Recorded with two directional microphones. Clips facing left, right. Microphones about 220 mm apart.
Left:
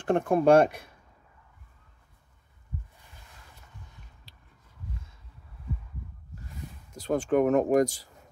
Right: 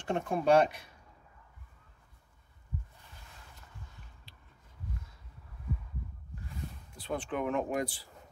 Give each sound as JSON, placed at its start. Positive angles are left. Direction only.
{"t": 0.0, "sound": "speech", "side_deg": 55}
{"t": 4.3, "sound": "a sound", "side_deg": 40}
{"t": 6.9, "sound": "speech", "side_deg": 45}